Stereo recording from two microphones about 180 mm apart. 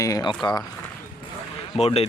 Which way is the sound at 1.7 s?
35° left (ahead or behind).